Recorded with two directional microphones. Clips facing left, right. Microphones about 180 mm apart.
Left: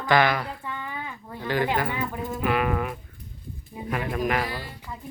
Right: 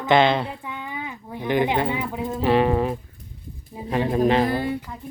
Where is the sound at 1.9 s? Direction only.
20° right (ahead or behind).